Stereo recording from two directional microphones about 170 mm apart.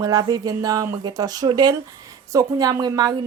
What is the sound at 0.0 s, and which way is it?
A woman's voice, 20° right (ahead or behind).